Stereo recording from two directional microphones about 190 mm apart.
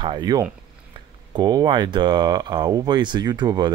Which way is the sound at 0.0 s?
25° right (ahead or behind).